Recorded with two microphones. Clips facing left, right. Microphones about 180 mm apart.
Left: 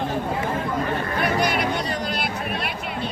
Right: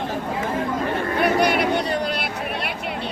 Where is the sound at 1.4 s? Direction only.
60° right (ahead or behind).